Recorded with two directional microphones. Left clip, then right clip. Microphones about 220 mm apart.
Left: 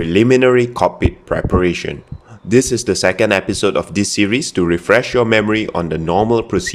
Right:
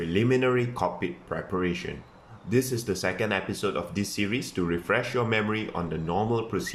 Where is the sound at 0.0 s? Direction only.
45° left (ahead or behind).